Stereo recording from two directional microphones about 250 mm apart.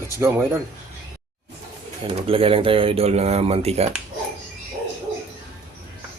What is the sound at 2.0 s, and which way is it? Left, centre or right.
Speech, right.